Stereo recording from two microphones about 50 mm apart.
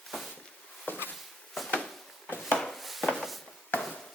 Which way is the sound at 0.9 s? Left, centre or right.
Left.